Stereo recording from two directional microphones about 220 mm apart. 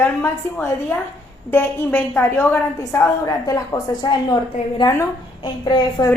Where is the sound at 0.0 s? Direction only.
10° left (ahead or behind).